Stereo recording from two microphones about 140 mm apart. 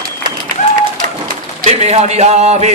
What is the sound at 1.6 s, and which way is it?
Mantra, 50° right (ahead or behind).